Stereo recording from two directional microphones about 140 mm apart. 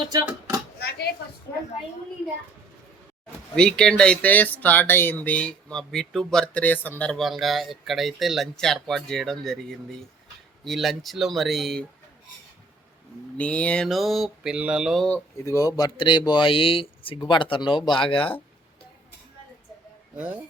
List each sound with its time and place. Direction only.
0.1 s speech: 30° right (ahead or behind)
3.5 s speech: 5° left (ahead or behind)
13.3 s speech: 10° left (ahead or behind)
15.4 s speech: 25° left (ahead or behind)
16.0 s speech: 35° left (ahead or behind)
20.1 s speech: 10° right (ahead or behind)